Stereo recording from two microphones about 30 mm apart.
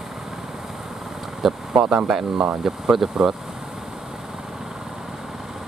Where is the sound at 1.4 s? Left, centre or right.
Centre.